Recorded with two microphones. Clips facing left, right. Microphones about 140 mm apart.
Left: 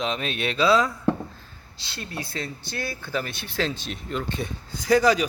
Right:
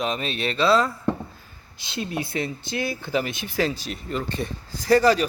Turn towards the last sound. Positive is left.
turn(degrees=0)  # may be behind; listen again after turning